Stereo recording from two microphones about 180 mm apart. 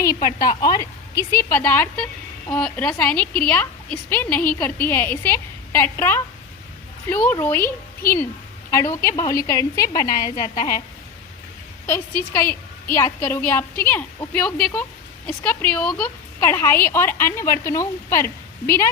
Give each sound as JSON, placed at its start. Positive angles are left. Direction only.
{"t": 0.0, "sound": "a woman's voice", "side_deg": 20}
{"t": 8.7, "sound": "a woman's voice", "side_deg": 15}
{"t": 10.1, "sound": "a woman's voice", "side_deg": 45}
{"t": 11.9, "sound": "a woman's voice", "side_deg": 15}